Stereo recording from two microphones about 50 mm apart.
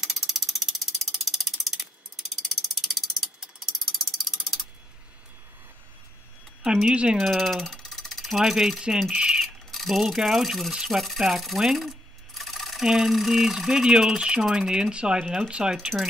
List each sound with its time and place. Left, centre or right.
0.0 s ratchet: centre
6.6 s speech: centre
7.2 s speech: centre
9.4 s speech: centre
10.7 s speech: centre
11.0 s speech: centre
12.4 s a sound: centre
12.8 s speech: centre